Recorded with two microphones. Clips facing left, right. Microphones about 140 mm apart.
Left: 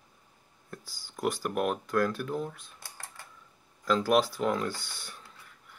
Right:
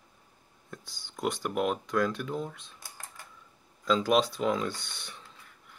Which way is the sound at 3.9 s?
20° right (ahead or behind).